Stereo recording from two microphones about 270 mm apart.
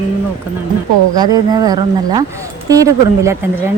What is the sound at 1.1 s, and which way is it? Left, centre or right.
A woman's voice, centre.